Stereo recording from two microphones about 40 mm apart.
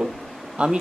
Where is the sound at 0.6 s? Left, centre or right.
Right.